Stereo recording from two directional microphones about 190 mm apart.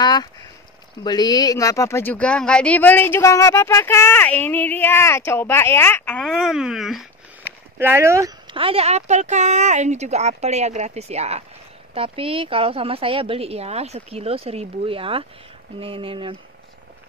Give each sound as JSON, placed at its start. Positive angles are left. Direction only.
{"t": 0.0, "sound": "a sound", "side_deg": 20}
{"t": 1.0, "sound": "speech", "side_deg": 20}
{"t": 7.8, "sound": "speech", "side_deg": -15}
{"t": 8.5, "sound": "a woman's voice", "side_deg": -30}